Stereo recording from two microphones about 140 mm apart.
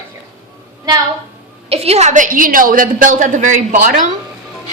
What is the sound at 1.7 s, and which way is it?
A woman's voice, 45° right (ahead or behind).